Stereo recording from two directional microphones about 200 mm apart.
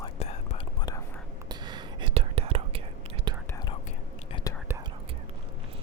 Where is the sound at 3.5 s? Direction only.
20° left (ahead or behind).